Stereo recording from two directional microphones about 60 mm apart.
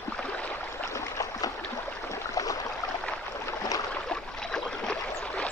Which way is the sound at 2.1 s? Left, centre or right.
Left.